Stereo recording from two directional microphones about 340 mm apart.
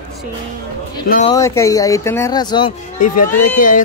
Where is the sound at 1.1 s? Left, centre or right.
Left.